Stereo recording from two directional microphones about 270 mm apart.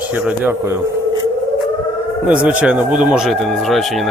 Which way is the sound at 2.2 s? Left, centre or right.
Centre.